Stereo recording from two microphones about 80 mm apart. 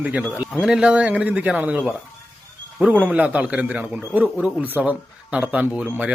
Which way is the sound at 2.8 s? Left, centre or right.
Centre.